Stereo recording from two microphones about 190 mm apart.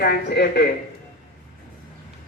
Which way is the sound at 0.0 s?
55° left (ahead or behind).